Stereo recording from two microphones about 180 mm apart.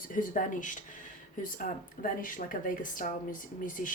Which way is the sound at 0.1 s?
50° left (ahead or behind).